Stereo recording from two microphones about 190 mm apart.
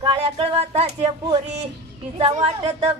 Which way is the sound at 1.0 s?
20° right (ahead or behind).